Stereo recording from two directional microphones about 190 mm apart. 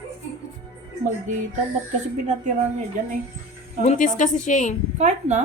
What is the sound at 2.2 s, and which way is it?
Speech, 40° right (ahead or behind).